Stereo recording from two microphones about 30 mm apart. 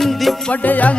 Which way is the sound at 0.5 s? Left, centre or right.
Left.